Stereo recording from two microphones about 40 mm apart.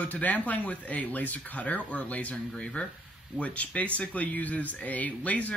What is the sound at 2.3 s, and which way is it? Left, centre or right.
Speech, left.